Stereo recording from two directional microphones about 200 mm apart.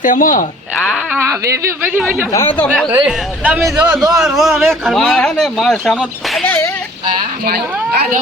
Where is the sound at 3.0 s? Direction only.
5° right (ahead or behind).